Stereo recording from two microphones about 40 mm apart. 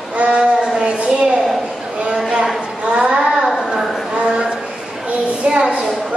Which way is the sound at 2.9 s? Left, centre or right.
Right.